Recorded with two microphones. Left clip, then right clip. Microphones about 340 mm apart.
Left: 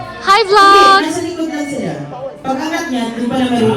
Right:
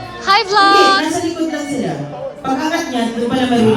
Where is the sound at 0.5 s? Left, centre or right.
Centre.